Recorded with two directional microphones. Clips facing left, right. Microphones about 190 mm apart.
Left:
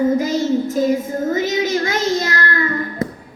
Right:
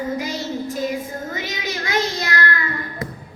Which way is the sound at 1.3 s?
45° left (ahead or behind).